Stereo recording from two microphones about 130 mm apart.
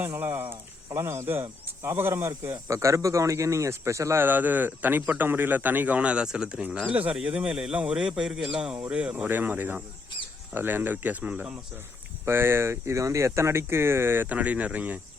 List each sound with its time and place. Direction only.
0.0 s speech: 15° right (ahead or behind)